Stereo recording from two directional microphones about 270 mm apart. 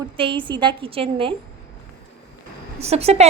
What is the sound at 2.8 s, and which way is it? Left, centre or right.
Speech, right.